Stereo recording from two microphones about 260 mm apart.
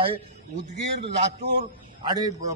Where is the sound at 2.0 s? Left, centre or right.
Centre.